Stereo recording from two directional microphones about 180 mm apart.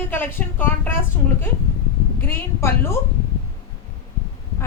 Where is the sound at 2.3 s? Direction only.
15° left (ahead or behind).